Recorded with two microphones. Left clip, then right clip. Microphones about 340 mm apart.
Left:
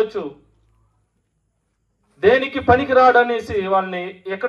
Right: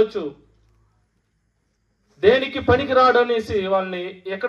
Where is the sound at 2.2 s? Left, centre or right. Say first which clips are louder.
Left 1 dB; left.